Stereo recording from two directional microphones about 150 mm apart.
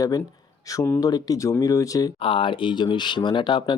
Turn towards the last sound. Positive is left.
turn(degrees=30)  # may be behind; listen again after turning